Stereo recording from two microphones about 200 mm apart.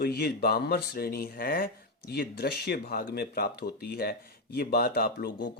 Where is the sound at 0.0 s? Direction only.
50° left (ahead or behind).